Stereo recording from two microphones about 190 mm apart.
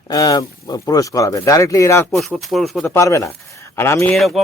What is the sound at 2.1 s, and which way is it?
Speech, centre (ahead or behind).